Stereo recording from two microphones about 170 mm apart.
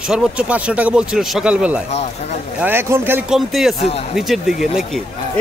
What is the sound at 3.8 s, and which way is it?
Speech, 35° left (ahead or behind).